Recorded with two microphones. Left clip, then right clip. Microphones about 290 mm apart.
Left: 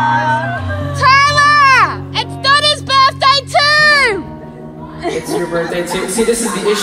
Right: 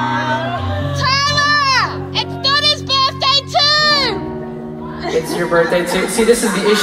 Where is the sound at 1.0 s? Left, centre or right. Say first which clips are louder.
Left 6 dB; centre.